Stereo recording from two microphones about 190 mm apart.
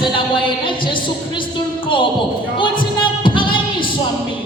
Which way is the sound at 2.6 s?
25° left (ahead or behind).